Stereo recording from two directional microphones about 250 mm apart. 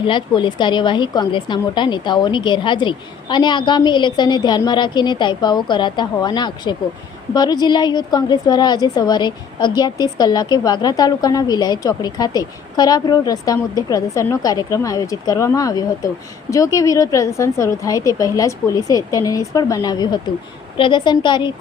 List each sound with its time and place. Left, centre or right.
0.0 s a woman's voice: centre